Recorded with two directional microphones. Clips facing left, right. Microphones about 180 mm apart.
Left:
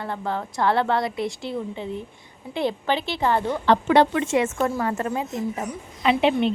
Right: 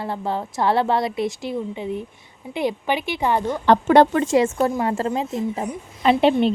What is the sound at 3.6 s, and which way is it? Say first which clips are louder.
A woman's voice: right 4 dB; 45° right (ahead or behind).